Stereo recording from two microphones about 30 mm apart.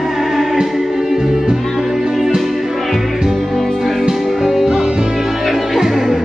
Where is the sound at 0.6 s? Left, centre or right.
Centre.